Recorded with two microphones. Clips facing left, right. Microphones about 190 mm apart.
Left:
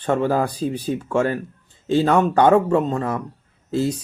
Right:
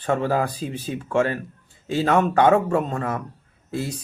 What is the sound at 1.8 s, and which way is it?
Speech, 30° left (ahead or behind).